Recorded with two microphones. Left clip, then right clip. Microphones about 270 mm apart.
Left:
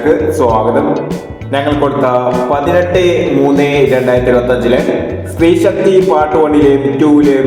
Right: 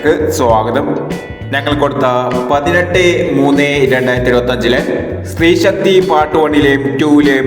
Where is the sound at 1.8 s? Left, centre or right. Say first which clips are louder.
Even; right.